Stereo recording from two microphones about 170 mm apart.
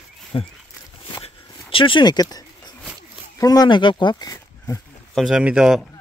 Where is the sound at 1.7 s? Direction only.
30° left (ahead or behind).